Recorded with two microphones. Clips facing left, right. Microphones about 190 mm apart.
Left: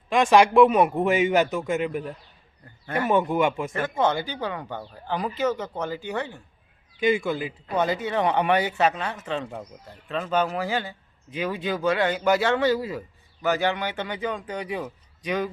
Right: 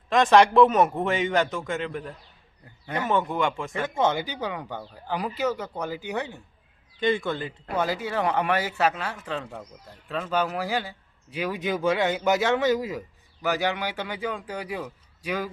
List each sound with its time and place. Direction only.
0.1 s a man's voice: 10° left (ahead or behind)
4.1 s a man's voice: 15° right (ahead or behind)
7.0 s a man's voice: 5° left (ahead or behind)
7.8 s speech: 5° right (ahead or behind)
9.4 s a man's voice: 15° left (ahead or behind)
10.1 s a man's voice: centre (ahead or behind)